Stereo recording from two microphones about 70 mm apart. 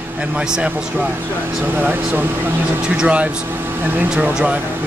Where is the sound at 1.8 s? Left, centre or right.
Right.